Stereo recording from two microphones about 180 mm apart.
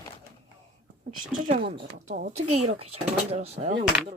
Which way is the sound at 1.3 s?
45° right (ahead or behind).